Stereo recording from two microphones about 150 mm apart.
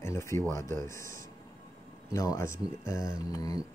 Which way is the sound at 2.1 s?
20° left (ahead or behind).